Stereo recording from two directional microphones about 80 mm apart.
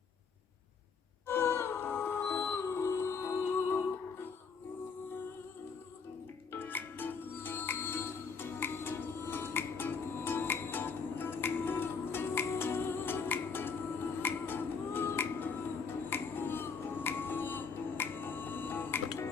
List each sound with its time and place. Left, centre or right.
1.3 s music: left
6.5 s music: left
14.2 s finger snapping: left
16.0 s music: left